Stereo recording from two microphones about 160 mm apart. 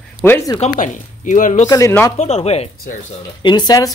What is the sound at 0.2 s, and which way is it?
Speech, 15° left (ahead or behind).